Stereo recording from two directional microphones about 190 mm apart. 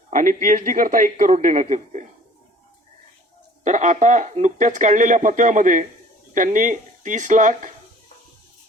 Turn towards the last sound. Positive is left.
turn(degrees=-40)  # may be behind; listen again after turning